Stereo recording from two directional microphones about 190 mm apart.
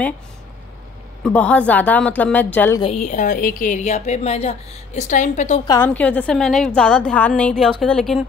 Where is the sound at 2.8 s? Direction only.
35° left (ahead or behind).